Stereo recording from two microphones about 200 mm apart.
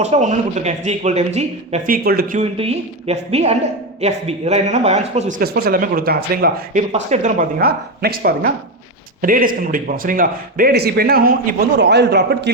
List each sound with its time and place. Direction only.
0.0 s speech: 35° right (ahead or behind)
2.6 s speech: 30° right (ahead or behind)
5.4 s a man's voice: 50° right (ahead or behind)
6.9 s a man's voice: 35° right (ahead or behind); by 12.5 s 55° right (ahead or behind)